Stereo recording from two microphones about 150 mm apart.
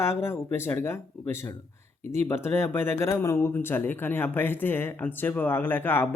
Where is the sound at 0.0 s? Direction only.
15° left (ahead or behind).